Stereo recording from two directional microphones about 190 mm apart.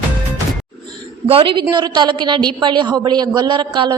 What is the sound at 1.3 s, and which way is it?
A woman's voice, 30° right (ahead or behind).